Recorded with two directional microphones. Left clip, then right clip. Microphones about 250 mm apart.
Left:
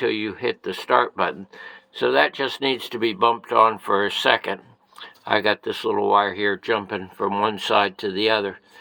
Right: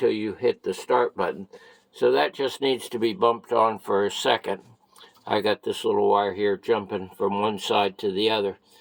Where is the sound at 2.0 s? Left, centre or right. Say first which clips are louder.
Left 2 dB; centre.